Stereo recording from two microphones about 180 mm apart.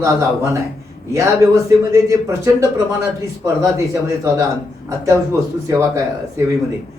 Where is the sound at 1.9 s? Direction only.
15° right (ahead or behind).